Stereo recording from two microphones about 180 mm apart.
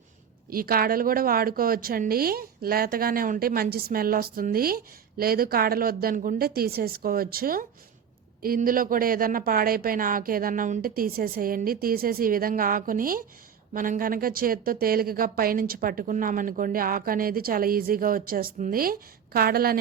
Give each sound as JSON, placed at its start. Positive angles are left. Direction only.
{"t": 0.5, "sound": "a woman's voice", "side_deg": -55}